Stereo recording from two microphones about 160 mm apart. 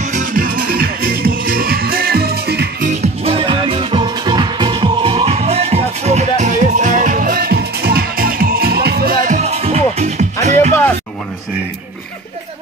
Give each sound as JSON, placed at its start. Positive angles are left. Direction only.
{"t": 0.0, "sound": "music", "side_deg": -50}
{"t": 2.9, "sound": "music", "side_deg": -40}
{"t": 9.2, "sound": "music", "side_deg": -45}